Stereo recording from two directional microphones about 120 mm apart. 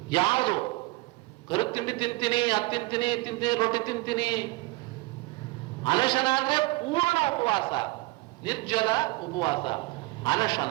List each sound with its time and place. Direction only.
0.1 s a sound: 45° left (ahead or behind)
1.5 s a man's voice: 45° left (ahead or behind)
5.8 s a man's voice: 40° left (ahead or behind)